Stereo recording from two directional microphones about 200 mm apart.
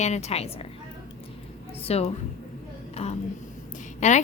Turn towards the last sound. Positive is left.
turn(degrees=35)  # may be behind; listen again after turning